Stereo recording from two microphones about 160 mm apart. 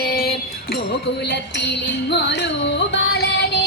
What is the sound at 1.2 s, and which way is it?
Music, 90° left.